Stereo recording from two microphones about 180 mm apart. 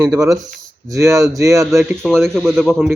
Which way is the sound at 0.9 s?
15° right (ahead or behind).